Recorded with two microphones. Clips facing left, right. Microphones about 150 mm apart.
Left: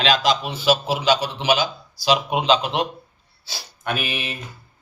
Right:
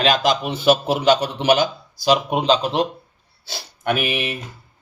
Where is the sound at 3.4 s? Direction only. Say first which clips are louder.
Right 4 dB; 60° right (ahead or behind).